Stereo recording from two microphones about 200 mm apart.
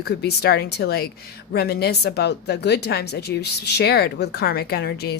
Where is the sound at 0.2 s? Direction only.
55° left (ahead or behind).